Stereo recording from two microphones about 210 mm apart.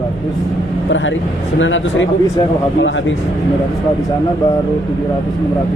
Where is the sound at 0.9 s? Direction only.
65° left (ahead or behind).